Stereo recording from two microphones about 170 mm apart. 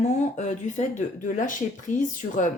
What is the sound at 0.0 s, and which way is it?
A woman's voice, 40° left (ahead or behind).